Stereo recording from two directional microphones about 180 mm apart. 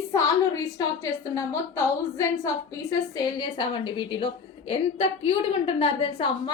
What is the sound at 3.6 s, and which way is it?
A woman's voice, 25° left (ahead or behind).